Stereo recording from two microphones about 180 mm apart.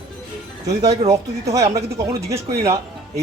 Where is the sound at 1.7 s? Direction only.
15° right (ahead or behind).